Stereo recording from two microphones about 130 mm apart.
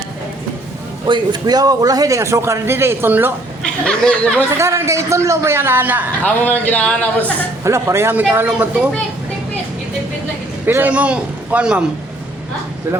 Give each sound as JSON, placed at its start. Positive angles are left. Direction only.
{"t": 1.0, "sound": "a man's voice", "side_deg": -35}
{"t": 3.6, "sound": "speech", "side_deg": 5}
{"t": 4.5, "sound": "a man's voice", "side_deg": -20}
{"t": 6.2, "sound": "speech", "side_deg": 15}
{"t": 7.6, "sound": "speech", "side_deg": -20}
{"t": 10.7, "sound": "speech", "side_deg": -15}